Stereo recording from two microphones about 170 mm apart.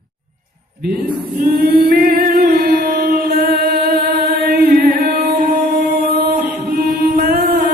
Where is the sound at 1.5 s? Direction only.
70° right (ahead or behind).